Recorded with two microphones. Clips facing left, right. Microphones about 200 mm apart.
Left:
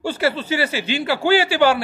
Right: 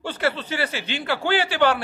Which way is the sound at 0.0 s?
5° left (ahead or behind).